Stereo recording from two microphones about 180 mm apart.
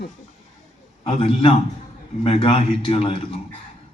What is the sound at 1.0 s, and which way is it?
A man's voice, 30° left (ahead or behind).